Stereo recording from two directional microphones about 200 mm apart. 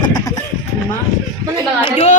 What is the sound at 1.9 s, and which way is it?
Speech, 35° left (ahead or behind).